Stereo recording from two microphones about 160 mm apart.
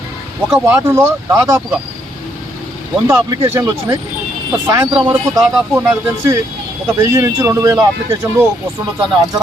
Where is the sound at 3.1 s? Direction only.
20° right (ahead or behind).